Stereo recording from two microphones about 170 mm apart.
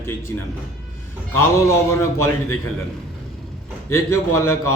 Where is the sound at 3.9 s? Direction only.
15° left (ahead or behind).